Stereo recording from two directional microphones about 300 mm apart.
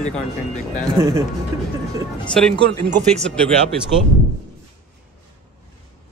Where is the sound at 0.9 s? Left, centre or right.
Centre.